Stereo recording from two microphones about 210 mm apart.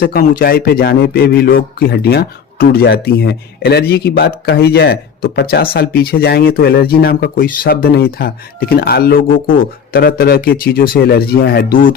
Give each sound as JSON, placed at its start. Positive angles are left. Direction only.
{"t": 0.0, "sound": "a man's voice", "side_deg": 45}